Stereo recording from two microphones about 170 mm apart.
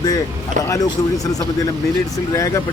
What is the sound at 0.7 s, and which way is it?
Speech, 20° left (ahead or behind).